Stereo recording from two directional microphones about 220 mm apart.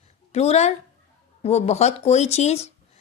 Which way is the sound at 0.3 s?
30° left (ahead or behind).